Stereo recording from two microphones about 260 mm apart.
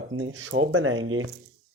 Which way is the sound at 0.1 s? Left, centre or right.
Right.